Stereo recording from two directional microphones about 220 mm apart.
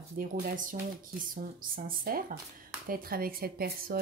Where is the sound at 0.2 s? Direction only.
40° right (ahead or behind).